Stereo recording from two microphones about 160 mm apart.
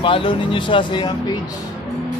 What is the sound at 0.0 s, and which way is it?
Speech, 30° left (ahead or behind).